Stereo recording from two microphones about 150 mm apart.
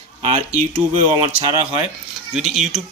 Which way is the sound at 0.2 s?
45° right (ahead or behind).